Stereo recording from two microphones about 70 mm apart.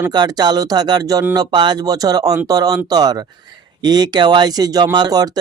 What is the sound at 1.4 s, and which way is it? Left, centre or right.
Speech, right.